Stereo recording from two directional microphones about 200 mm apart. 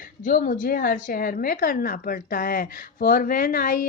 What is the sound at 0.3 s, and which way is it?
Speech, 45° left (ahead or behind).